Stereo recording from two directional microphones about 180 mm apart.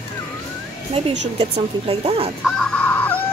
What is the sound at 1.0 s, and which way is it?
Speech, 35° right (ahead or behind).